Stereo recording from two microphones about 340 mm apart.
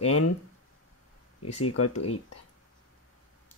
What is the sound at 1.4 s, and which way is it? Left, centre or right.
Mantra, left.